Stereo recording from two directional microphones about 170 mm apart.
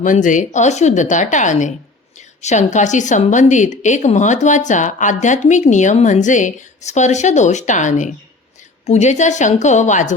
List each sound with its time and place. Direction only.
0.0 s a woman's voice: 50° left (ahead or behind)